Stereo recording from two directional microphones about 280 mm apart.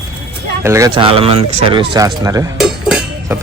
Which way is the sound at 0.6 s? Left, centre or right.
Centre.